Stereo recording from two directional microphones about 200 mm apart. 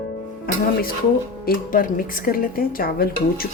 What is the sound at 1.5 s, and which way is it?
Speech, 45° left (ahead or behind).